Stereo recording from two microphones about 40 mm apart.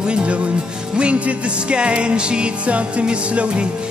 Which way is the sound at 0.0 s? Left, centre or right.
Right.